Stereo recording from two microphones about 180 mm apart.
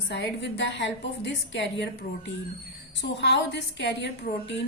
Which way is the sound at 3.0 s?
75° left (ahead or behind).